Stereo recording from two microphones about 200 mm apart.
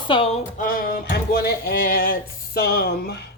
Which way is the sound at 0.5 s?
45° left (ahead or behind).